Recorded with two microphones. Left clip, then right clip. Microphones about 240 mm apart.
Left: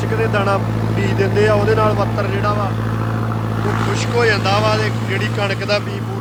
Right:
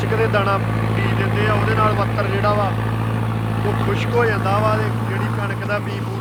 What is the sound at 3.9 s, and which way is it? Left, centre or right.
Speech, centre.